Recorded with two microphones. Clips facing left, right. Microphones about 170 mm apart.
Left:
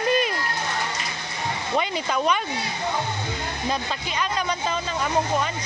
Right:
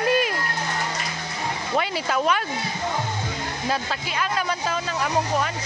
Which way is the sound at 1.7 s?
5° right (ahead or behind).